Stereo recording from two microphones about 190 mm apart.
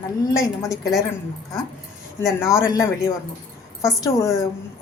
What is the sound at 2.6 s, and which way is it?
A woman's voice, 15° left (ahead or behind).